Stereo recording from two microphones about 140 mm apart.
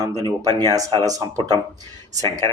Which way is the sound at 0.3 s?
25° right (ahead or behind).